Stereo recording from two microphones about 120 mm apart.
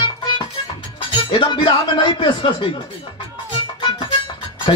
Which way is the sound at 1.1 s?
45° left (ahead or behind).